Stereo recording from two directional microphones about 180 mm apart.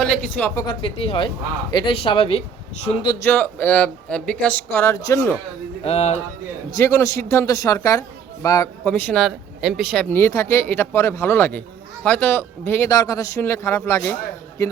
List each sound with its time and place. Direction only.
0.0 s speech: 5° left (ahead or behind)
0.6 s speech: 30° left (ahead or behind)
3.2 s speech: 10° left (ahead or behind)
5.8 s music: 35° left (ahead or behind)
6.7 s speech: 15° left (ahead or behind)
8.8 s speech: 10° left (ahead or behind)
9.9 s speech: 10° left (ahead or behind)